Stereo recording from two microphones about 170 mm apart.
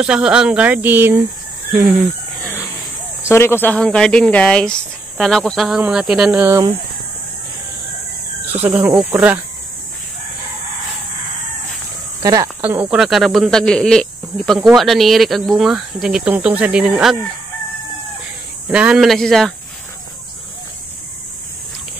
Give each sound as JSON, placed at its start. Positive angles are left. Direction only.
{"t": 0.0, "sound": "speech", "side_deg": -5}
{"t": 3.3, "sound": "speech", "side_deg": 15}
{"t": 8.6, "sound": "speech", "side_deg": -10}
{"t": 12.2, "sound": "speech", "side_deg": -20}
{"t": 12.9, "sound": "speech", "side_deg": 0}
{"t": 18.7, "sound": "speech", "side_deg": -5}